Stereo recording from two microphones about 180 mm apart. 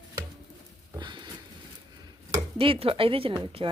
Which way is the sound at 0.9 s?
25° right (ahead or behind).